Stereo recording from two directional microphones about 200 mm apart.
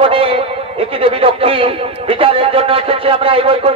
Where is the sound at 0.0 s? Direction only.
25° right (ahead or behind).